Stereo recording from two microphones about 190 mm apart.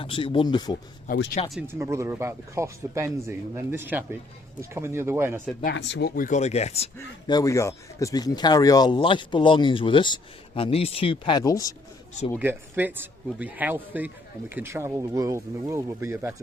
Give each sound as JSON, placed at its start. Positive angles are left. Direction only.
{"t": 0.0, "sound": "speech", "side_deg": 30}
{"t": 1.1, "sound": "speech", "side_deg": 45}
{"t": 1.6, "sound": "speech", "side_deg": -15}
{"t": 5.7, "sound": "speech", "side_deg": 65}
{"t": 7.3, "sound": "speech", "side_deg": 15}
{"t": 12.4, "sound": "speech", "side_deg": -10}